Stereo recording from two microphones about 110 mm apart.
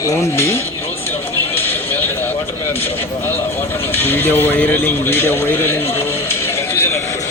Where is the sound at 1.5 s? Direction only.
20° left (ahead or behind).